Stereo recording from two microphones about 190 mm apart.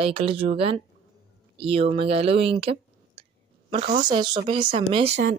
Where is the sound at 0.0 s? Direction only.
30° right (ahead or behind).